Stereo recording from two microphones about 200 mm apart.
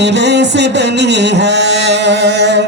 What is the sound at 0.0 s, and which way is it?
Music, 60° right (ahead or behind).